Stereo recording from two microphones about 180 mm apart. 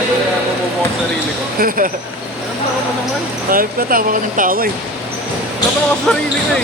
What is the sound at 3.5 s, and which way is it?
Speech, 50° right (ahead or behind).